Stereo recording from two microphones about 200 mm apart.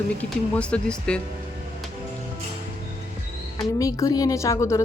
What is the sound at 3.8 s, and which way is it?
A woman's voice, 15° left (ahead or behind).